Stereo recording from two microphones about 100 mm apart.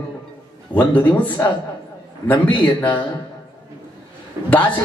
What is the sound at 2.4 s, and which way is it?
Speech, 50° left (ahead or behind).